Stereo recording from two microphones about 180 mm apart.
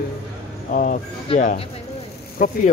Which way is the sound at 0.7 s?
50° left (ahead or behind).